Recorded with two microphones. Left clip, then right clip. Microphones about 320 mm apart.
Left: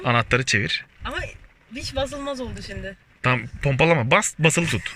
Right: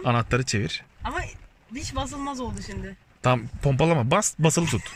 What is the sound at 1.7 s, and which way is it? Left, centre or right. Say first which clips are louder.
Speech: left 5 dB; right.